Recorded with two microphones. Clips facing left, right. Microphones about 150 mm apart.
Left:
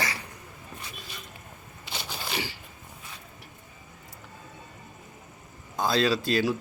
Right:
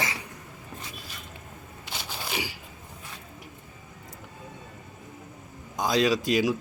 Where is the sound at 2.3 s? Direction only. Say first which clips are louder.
Even; 10° right (ahead or behind).